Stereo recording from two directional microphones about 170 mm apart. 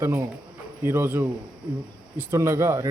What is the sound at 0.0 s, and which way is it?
Speech, 15° right (ahead or behind).